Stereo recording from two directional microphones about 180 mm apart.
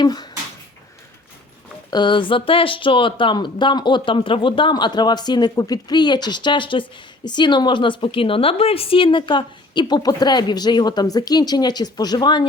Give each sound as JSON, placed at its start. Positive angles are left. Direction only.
{"t": 0.0, "sound": "speech", "side_deg": 20}
{"t": 1.9, "sound": "a woman's voice", "side_deg": 25}